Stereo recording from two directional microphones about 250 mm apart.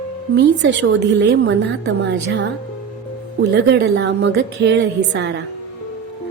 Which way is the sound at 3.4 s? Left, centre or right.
Right.